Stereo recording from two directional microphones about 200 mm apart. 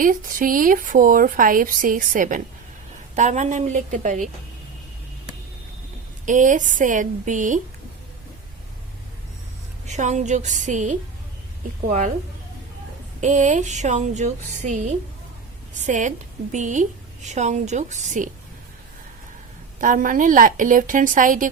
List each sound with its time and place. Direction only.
0.0 s a woman's voice: 45° right (ahead or behind)
6.2 s a woman's voice: 40° right (ahead or behind)
9.8 s a woman's voice: 35° right (ahead or behind)
13.2 s a woman's voice: 40° right (ahead or behind)
19.8 s a woman's voice: 40° right (ahead or behind)